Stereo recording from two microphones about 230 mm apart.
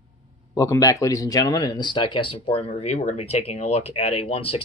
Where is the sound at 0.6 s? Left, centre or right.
Centre.